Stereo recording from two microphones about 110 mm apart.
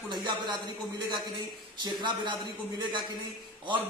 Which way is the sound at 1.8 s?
45° right (ahead or behind).